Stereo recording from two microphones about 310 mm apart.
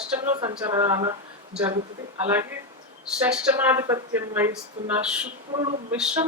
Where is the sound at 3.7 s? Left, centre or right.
Centre.